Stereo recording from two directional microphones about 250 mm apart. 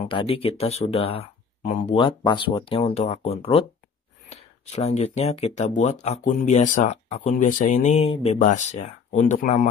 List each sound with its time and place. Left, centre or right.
0.0 s speech: left